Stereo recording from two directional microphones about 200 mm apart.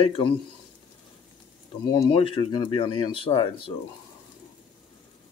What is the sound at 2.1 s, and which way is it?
Speech, 25° left (ahead or behind).